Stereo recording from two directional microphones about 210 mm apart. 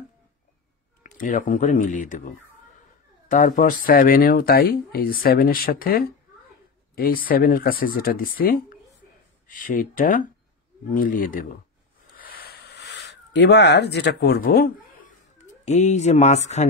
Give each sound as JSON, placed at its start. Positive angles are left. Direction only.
{"t": 1.0, "sound": "speech", "side_deg": 35}
{"t": 3.3, "sound": "speech", "side_deg": 40}
{"t": 12.2, "sound": "a sound", "side_deg": 45}
{"t": 15.3, "sound": "speech", "side_deg": 35}